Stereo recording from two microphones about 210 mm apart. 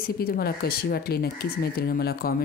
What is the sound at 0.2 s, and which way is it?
Speech, 45° left (ahead or behind).